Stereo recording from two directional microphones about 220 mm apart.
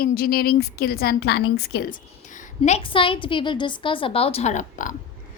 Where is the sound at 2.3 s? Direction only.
30° left (ahead or behind).